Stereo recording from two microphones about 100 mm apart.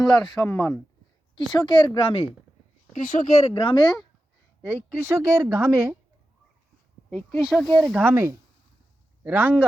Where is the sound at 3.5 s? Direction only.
55° left (ahead or behind).